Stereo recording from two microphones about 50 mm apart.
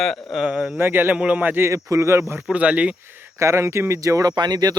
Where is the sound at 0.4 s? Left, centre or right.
Right.